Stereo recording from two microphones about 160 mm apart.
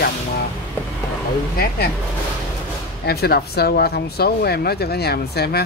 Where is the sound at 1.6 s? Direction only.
80° left.